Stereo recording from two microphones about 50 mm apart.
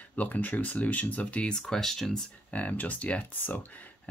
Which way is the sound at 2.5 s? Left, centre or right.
Left.